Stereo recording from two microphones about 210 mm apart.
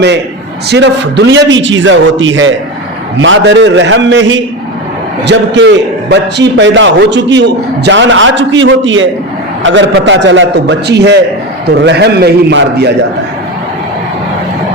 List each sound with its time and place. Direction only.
0.7 s a man's voice: 55° right (ahead or behind)